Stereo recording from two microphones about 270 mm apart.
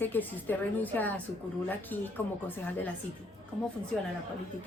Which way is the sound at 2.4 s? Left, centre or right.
Centre.